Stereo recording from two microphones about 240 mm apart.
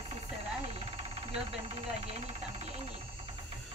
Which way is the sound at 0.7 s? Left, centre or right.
Right.